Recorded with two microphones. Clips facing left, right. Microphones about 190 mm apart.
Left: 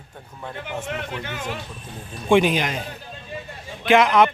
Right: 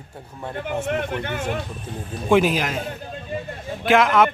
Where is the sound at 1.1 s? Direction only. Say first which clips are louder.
Right 4 dB; 55° right (ahead or behind).